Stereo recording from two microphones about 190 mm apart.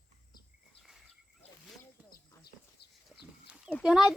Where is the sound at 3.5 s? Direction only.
Centre (ahead or behind).